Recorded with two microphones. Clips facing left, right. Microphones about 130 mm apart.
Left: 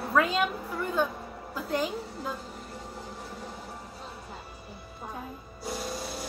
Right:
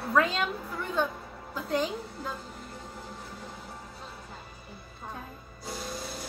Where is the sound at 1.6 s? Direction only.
Centre (ahead or behind).